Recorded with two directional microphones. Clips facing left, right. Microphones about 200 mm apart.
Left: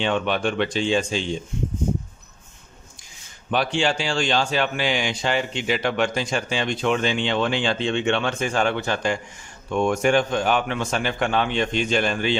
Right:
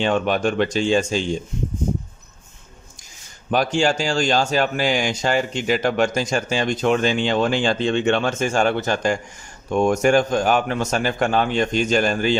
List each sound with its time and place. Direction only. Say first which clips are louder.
0.0 s speech: right 3 dB; 40° right (ahead or behind)
3.5 s speech: right 3 dB; 45° right (ahead or behind)